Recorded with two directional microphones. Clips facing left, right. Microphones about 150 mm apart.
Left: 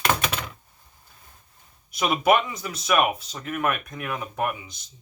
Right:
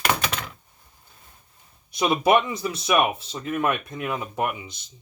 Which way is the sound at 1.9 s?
30° right (ahead or behind).